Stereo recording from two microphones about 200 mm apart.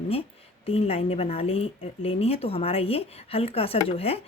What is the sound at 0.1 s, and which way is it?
A woman's voice, 30° left (ahead or behind).